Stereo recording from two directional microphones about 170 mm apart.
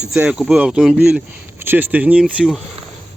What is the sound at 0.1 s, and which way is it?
Speech, 5° right (ahead or behind).